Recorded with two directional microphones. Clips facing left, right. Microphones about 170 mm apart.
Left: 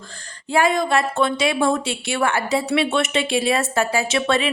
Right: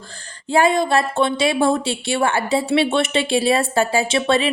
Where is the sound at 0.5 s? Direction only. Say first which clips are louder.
Right 2 dB; 30° right (ahead or behind).